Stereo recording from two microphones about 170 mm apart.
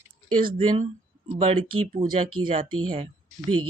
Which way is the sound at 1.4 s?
35° right (ahead or behind).